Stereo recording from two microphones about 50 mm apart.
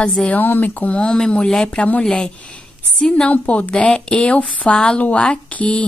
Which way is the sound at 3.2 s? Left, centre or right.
Left.